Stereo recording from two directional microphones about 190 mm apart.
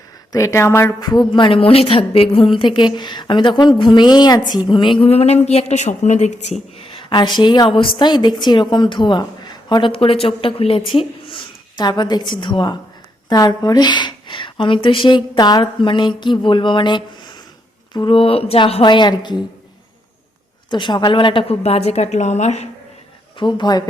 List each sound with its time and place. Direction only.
0.3 s a woman's voice: 15° left (ahead or behind)
20.7 s a woman's voice: 25° left (ahead or behind)
23.4 s a woman's voice: 25° left (ahead or behind)